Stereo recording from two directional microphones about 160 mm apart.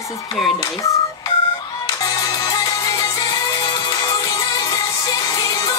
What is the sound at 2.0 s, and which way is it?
Music, 25° left (ahead or behind).